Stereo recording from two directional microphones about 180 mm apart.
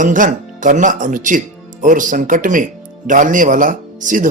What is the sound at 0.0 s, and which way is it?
Speech, 45° right (ahead or behind).